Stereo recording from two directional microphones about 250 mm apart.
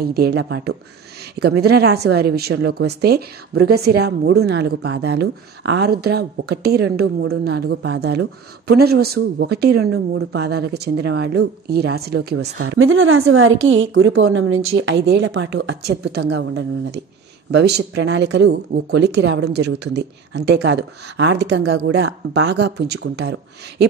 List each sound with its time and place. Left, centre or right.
0.0 s speech: right
12.6 s a woman's voice: right